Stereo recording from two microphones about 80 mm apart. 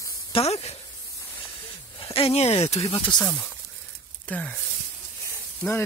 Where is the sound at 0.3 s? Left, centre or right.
Left.